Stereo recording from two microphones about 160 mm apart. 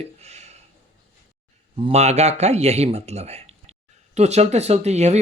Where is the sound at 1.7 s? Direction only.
40° right (ahead or behind).